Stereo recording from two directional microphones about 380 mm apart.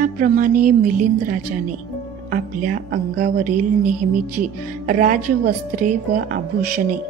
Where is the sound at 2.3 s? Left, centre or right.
Centre.